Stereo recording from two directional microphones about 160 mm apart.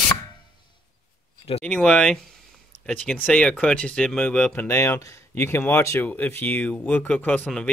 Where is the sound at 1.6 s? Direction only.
5° left (ahead or behind).